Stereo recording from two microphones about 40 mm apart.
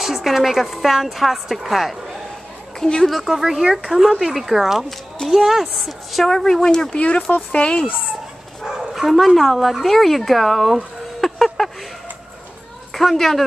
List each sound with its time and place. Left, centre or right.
0.0 s speech: centre
2.8 s a woman's voice: centre
3.3 s speech: centre
4.8 s a child's voice: centre
6.3 s speech: centre
7.5 s a woman's voice: left
8.6 s speech: centre
11.1 s a sound: centre
12.9 s a woman's voice: centre